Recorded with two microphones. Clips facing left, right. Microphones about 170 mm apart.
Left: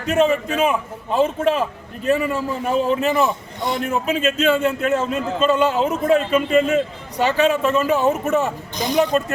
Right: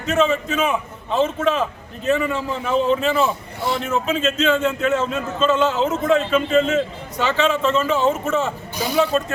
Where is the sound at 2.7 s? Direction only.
5° left (ahead or behind).